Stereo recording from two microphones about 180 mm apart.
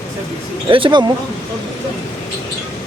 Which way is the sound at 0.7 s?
25° right (ahead or behind).